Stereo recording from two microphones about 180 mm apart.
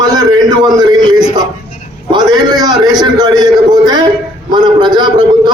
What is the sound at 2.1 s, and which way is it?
A man's voice, 20° right (ahead or behind).